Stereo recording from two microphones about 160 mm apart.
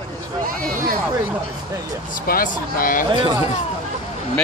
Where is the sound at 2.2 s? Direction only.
65° left (ahead or behind).